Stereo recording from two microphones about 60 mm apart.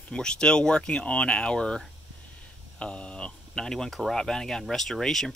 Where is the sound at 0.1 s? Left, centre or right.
Centre.